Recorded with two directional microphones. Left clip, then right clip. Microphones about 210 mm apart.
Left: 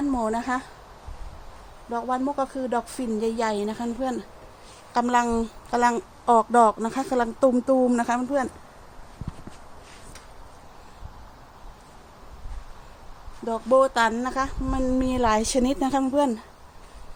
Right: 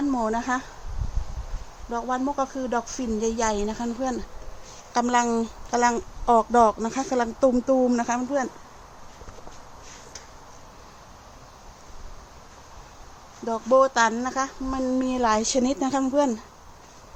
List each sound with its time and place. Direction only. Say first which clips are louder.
0.1 s speech: even; 10° left (ahead or behind)
1.9 s speech: even; 10° left (ahead or behind)
13.4 s speech: even; 5° left (ahead or behind)